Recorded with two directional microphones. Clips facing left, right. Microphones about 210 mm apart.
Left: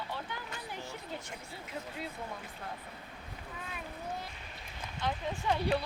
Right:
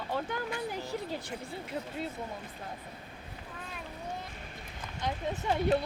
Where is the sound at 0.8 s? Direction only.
35° right (ahead or behind).